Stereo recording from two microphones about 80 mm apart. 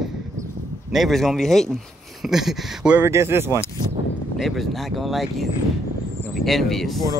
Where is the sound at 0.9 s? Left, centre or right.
Centre.